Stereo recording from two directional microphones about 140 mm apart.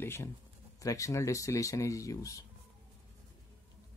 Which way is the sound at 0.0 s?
15° left (ahead or behind).